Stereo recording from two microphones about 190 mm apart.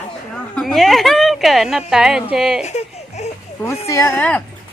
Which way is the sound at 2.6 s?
35° left (ahead or behind).